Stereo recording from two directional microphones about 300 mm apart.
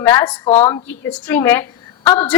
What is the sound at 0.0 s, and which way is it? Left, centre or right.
Speech, centre.